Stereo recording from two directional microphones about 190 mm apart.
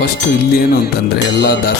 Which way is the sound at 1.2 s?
65° left (ahead or behind).